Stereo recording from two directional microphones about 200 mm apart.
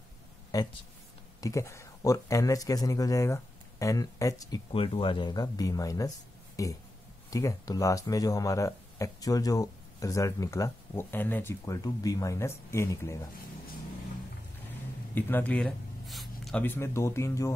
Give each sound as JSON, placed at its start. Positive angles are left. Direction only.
{"t": 0.5, "sound": "speech", "side_deg": 15}
{"t": 4.7, "sound": "speech", "side_deg": 25}
{"t": 15.1, "sound": "speech", "side_deg": 10}